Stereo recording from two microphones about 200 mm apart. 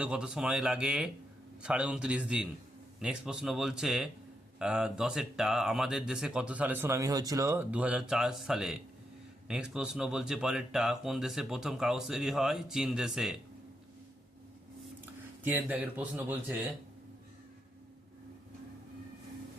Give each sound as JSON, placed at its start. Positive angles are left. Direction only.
{"t": 0.0, "sound": "speech", "side_deg": -5}
{"t": 15.4, "sound": "speech", "side_deg": -10}